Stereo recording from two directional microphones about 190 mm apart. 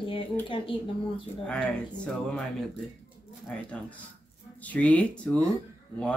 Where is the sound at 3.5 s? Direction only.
5° left (ahead or behind).